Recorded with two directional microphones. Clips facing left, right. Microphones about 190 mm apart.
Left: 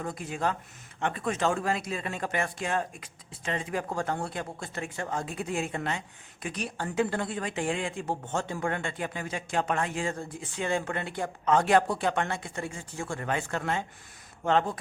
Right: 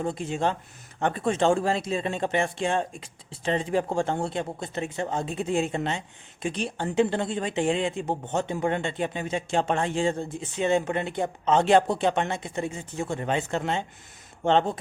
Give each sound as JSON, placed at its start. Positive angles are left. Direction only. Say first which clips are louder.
{"t": 0.0, "sound": "speech", "louder": "right 5 dB", "side_deg": -25}